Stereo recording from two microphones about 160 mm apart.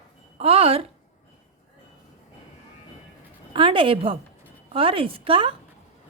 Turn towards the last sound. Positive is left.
turn(degrees=-35)  # may be behind; listen again after turning